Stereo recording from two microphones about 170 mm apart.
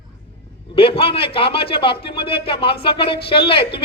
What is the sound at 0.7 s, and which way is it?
A man's voice, 35° left (ahead or behind).